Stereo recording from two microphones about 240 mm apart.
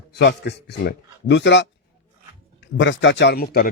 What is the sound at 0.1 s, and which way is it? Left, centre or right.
A man's voice, left.